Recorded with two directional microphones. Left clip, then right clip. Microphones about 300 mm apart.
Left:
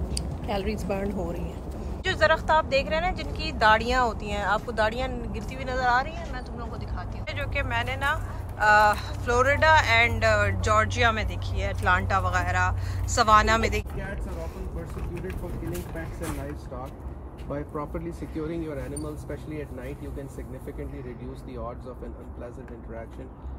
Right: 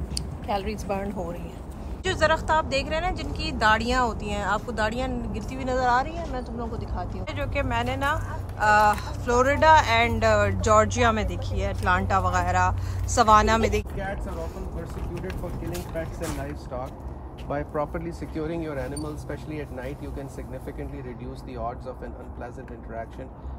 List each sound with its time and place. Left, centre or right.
0.1 s speech: centre
2.0 s speech: centre
15.2 s speech: centre
17.9 s speech: centre